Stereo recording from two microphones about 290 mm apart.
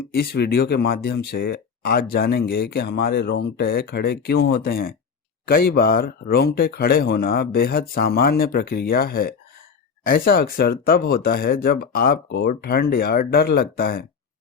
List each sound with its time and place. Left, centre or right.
0.1 s speech: left